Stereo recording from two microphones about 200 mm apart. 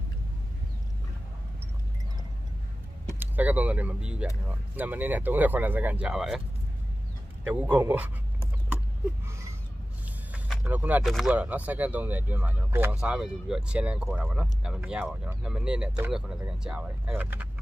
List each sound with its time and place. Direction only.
3.2 s speech: 10° right (ahead or behind)
7.4 s speech: 10° right (ahead or behind)
10.3 s speech: 5° right (ahead or behind)